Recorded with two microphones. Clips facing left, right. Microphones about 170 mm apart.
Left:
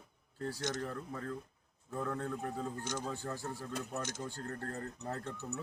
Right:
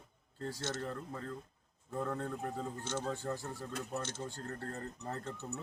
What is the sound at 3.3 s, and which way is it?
Speech, 15° right (ahead or behind).